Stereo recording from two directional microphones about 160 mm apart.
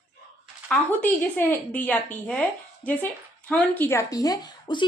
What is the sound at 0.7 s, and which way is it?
A woman's voice, 5° left (ahead or behind).